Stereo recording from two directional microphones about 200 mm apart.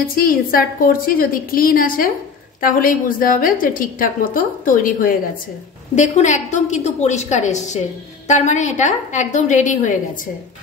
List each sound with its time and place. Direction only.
0.1 s a woman's voice: 45° left (ahead or behind)